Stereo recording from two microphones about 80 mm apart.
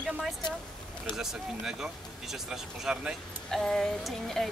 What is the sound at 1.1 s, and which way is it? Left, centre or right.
Speech, centre.